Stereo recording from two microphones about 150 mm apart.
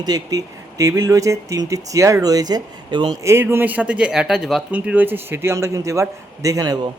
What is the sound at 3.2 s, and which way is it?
Speech, 15° right (ahead or behind).